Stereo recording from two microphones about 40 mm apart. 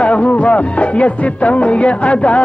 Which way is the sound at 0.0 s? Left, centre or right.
Left.